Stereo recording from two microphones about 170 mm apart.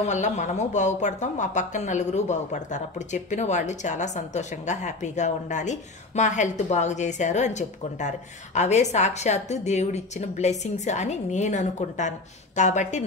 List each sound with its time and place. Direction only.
0.0 s speech: 45° left (ahead or behind)